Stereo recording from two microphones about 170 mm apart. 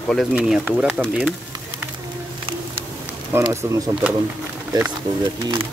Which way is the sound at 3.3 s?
15° right (ahead or behind).